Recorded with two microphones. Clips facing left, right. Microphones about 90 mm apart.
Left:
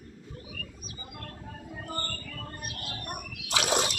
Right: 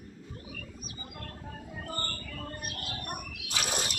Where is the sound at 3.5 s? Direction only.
90° left.